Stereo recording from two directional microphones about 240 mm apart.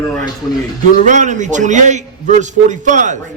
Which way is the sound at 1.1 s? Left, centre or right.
Right.